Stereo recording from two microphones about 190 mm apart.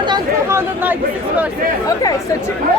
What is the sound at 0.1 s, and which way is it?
Chatter, 15° right (ahead or behind).